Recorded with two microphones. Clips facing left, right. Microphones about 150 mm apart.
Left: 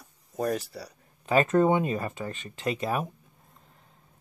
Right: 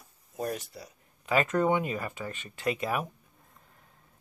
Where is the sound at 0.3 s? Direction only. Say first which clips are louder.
Left 5 dB; 40° left (ahead or behind).